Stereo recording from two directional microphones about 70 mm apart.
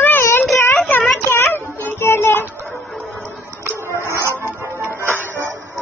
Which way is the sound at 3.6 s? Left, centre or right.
Right.